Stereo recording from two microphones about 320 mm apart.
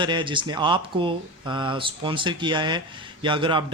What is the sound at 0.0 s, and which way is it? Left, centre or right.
Speech, centre.